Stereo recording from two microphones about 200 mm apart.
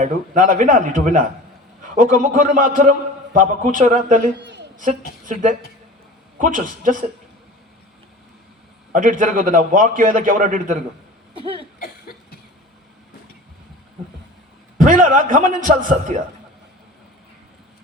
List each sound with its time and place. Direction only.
0.0 s a man's voice: 40° right (ahead or behind)
4.4 s a sound: 60° right (ahead or behind)
5.2 s a woman's voice: 40° right (ahead or behind)
8.9 s a man's voice: 40° right (ahead or behind)
11.8 s cough: 50° left (ahead or behind)
14.8 s a man's voice: 40° right (ahead or behind)